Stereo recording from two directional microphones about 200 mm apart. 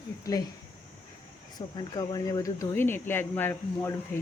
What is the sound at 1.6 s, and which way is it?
Speech, 25° left (ahead or behind).